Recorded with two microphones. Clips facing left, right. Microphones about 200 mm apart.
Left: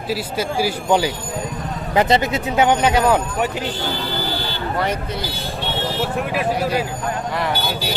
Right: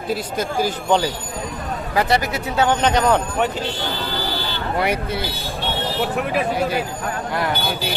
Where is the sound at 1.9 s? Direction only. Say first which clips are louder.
Left 3 dB; 20° left (ahead or behind).